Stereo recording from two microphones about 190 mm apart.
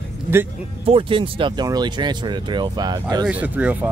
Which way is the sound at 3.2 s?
10° right (ahead or behind).